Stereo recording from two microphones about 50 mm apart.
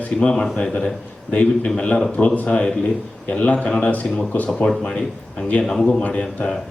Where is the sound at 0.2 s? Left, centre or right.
Centre.